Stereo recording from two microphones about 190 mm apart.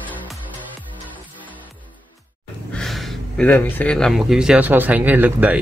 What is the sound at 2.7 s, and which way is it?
Speech, centre (ahead or behind).